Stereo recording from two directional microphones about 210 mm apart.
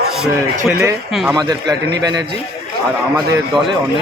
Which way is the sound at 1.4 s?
20° right (ahead or behind).